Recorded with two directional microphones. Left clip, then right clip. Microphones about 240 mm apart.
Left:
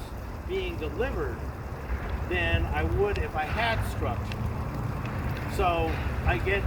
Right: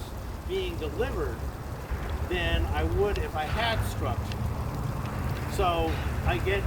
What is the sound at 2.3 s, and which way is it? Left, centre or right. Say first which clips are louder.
Speech: left 2 dB; centre.